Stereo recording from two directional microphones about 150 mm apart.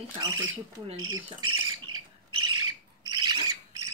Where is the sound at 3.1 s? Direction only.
30° right (ahead or behind).